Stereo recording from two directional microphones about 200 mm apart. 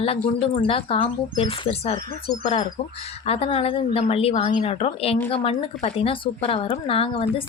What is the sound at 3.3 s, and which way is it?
Speech, 30° left (ahead or behind).